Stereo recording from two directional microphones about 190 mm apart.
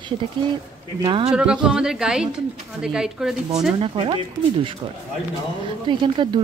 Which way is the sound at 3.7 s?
30° right (ahead or behind).